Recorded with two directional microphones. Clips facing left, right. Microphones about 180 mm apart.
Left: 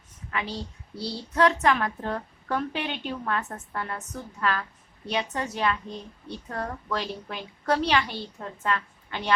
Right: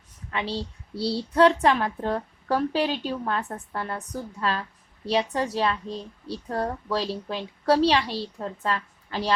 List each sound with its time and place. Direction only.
0.3 s a woman's voice: 30° right (ahead or behind)